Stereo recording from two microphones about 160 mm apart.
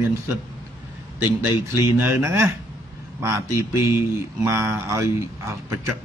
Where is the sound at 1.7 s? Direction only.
15° right (ahead or behind).